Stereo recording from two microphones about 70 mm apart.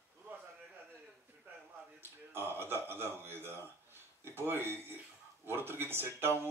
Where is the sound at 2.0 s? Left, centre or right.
Right.